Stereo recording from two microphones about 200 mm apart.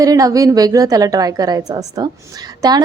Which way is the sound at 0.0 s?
15° right (ahead or behind).